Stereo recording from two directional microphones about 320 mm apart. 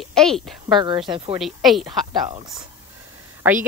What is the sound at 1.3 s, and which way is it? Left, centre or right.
Speech, centre.